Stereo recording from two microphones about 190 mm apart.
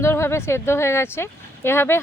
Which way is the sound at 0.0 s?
15° left (ahead or behind).